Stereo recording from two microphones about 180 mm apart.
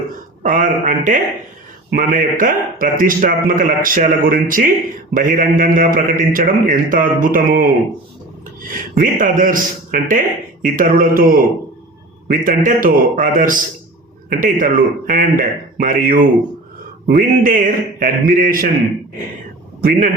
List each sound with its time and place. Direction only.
0.4 s a man's voice: 50° right (ahead or behind)
9.0 s a man's voice: 50° right (ahead or behind)
19.8 s speech: 55° right (ahead or behind)